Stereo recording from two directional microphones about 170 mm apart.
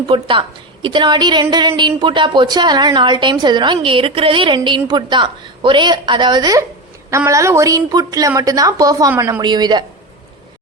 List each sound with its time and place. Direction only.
0.1 s a woman's voice: 30° right (ahead or behind)